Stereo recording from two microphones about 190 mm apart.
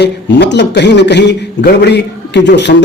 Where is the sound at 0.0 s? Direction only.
65° left (ahead or behind).